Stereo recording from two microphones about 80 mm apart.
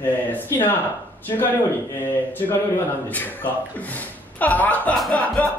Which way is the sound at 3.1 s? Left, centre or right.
Left.